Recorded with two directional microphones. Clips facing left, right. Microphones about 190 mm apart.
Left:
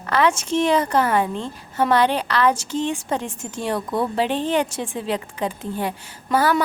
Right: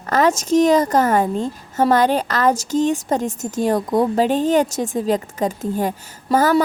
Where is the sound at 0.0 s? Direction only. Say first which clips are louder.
Right 3 dB; 40° right (ahead or behind).